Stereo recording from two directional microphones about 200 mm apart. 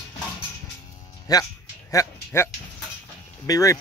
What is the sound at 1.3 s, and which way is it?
Speech, 20° left (ahead or behind).